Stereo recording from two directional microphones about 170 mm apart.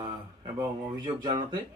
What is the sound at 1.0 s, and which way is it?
Speech, 30° right (ahead or behind).